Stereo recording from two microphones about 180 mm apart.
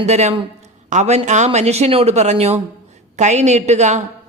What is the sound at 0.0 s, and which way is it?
Speech, 40° right (ahead or behind).